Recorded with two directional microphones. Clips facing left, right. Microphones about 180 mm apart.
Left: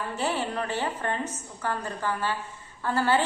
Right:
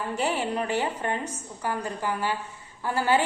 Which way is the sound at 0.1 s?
15° right (ahead or behind).